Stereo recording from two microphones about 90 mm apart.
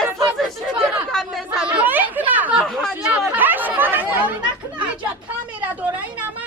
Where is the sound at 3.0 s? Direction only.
15° right (ahead or behind).